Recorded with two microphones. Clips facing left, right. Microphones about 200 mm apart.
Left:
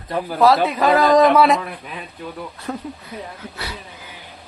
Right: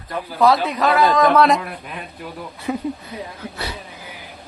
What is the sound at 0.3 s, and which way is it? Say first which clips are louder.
A man's voice: left 1 dB; 5° left (ahead or behind).